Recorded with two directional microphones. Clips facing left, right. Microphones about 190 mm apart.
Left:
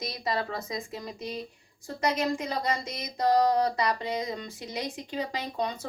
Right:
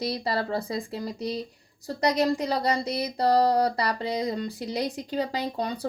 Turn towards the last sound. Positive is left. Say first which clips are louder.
# right 3 dB
turn(degrees=-35)  # may be behind; listen again after turning